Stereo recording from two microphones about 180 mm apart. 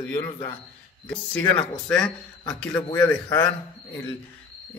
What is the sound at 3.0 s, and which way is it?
Speech, 25° left (ahead or behind).